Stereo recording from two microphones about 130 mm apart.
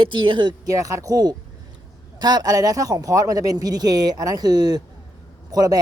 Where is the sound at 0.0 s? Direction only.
40° right (ahead or behind).